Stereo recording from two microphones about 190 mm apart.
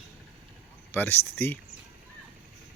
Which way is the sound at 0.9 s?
10° left (ahead or behind).